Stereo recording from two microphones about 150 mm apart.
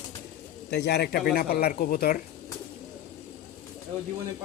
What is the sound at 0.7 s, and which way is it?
Speech, 90° left.